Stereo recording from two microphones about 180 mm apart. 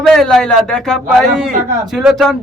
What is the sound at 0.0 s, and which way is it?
Speech, centre (ahead or behind).